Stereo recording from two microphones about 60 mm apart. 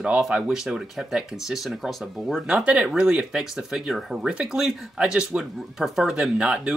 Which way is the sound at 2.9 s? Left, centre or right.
Centre.